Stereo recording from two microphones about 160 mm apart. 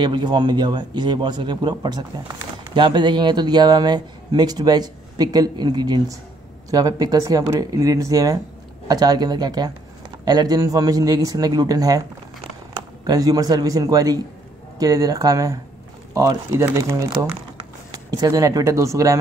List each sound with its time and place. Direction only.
0.0 s speech: 30° right (ahead or behind)
13.0 s speech: 25° right (ahead or behind)